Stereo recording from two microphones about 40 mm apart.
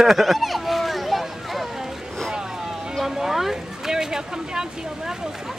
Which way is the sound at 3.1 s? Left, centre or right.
Centre.